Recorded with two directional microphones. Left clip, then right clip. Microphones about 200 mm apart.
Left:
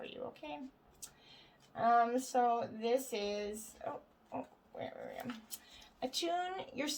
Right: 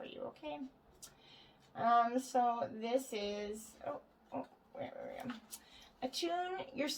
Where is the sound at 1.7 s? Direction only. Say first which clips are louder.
Left 1 dB; 35° left (ahead or behind).